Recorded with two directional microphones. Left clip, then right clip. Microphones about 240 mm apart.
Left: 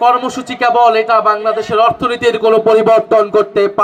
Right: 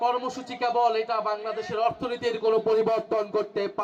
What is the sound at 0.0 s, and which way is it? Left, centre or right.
A man's voice, left.